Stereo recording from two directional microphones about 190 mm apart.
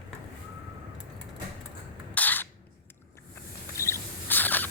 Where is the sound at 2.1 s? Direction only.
10° left (ahead or behind).